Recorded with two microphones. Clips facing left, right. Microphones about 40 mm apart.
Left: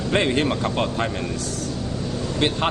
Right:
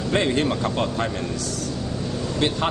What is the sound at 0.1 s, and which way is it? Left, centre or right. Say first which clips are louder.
Speech: left 1 dB; left.